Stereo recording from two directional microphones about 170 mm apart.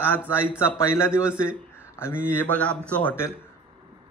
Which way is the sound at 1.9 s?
15° left (ahead or behind).